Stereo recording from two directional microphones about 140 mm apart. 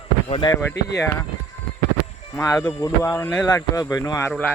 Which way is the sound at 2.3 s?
25° left (ahead or behind).